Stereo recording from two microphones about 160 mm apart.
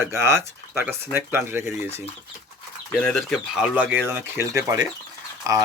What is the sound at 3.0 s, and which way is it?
Speech, 5° left (ahead or behind).